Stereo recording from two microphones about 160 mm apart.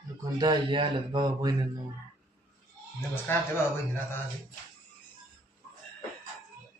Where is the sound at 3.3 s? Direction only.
15° left (ahead or behind).